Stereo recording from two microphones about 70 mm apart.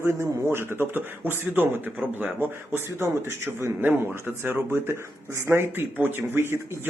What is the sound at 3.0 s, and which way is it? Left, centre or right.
A man's voice, right.